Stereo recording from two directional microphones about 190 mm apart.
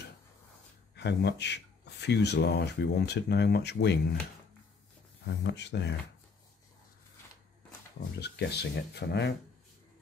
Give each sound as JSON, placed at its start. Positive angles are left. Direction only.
{"t": 0.9, "sound": "speech", "side_deg": 60}
{"t": 5.4, "sound": "speech", "side_deg": 65}
{"t": 8.2, "sound": "speech", "side_deg": 60}